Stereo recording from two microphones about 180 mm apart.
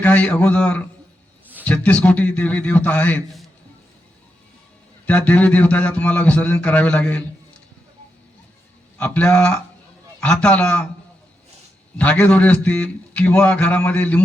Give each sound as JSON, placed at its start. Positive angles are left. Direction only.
{"t": 0.0, "sound": "a man's voice", "side_deg": 10}
{"t": 5.0, "sound": "a man's voice", "side_deg": 5}
{"t": 9.0, "sound": "a man's voice", "side_deg": 10}
{"t": 11.9, "sound": "a man's voice", "side_deg": 10}